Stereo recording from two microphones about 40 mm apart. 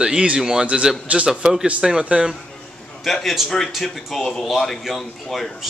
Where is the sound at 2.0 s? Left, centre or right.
Right.